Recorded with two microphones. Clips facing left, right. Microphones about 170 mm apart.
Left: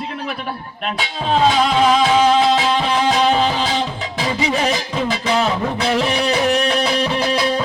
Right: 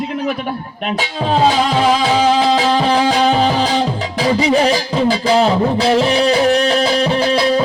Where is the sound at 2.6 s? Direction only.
40° right (ahead or behind).